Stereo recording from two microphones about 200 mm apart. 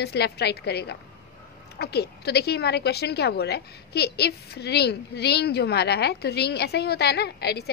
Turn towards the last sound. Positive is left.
turn(degrees=55)  # may be behind; listen again after turning